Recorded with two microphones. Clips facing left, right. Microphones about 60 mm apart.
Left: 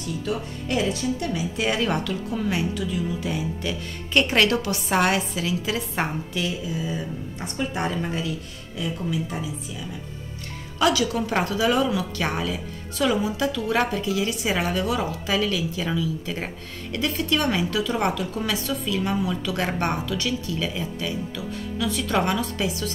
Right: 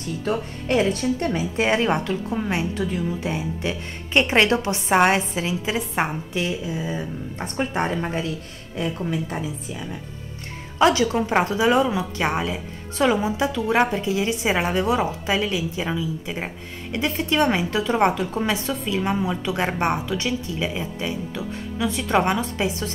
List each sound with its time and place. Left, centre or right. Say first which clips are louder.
0.2 s a woman's voice: right 3 dB; right
10.8 s a woman's voice: right 3 dB; right